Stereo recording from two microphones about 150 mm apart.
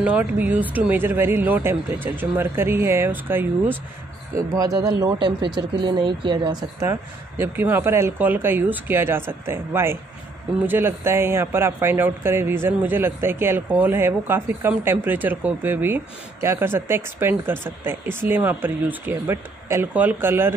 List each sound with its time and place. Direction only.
0.0 s speech: 10° right (ahead or behind)
4.4 s speech: 25° right (ahead or behind)
6.9 s speech: 15° right (ahead or behind)